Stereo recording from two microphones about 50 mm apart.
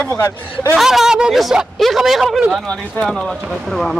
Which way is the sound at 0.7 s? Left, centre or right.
Centre.